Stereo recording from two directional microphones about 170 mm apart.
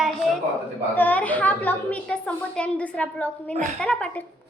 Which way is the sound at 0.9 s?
10° left (ahead or behind).